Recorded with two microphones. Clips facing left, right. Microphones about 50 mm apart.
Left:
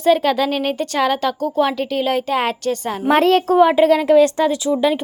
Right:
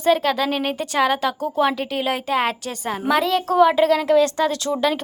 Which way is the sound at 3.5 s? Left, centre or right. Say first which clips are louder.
Even; left.